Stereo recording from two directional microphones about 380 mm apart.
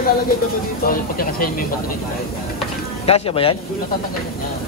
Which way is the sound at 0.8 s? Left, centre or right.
Left.